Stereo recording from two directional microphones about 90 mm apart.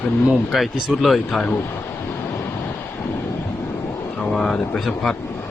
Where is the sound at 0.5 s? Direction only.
Centre (ahead or behind).